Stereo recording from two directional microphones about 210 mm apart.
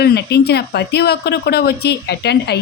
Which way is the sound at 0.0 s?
50° left (ahead or behind).